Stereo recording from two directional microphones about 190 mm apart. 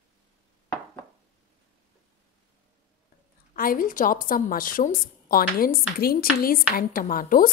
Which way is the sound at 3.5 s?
50° left (ahead or behind).